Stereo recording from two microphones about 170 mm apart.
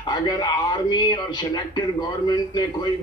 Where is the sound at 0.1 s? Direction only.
25° left (ahead or behind).